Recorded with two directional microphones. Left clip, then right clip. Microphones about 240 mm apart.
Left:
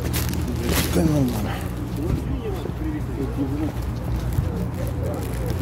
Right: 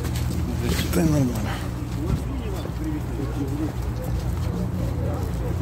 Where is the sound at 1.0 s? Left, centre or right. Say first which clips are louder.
Even; centre.